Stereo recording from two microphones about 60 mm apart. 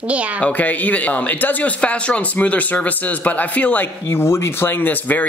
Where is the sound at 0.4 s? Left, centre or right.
Left.